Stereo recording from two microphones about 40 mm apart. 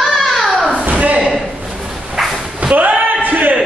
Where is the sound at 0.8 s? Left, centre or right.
Right.